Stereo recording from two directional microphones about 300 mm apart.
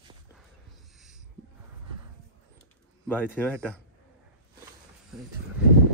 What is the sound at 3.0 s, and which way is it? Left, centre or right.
Speech, centre.